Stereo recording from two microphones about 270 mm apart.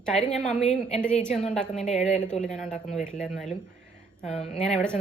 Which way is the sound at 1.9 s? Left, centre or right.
Left.